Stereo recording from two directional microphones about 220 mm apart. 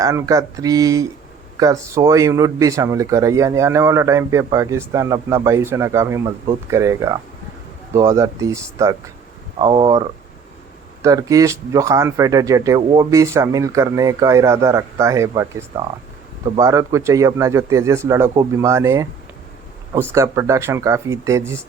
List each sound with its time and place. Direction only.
0.0 s speech: 15° right (ahead or behind)
11.0 s speech: 15° right (ahead or behind)